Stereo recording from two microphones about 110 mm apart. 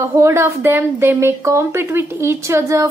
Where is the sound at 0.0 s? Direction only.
25° right (ahead or behind).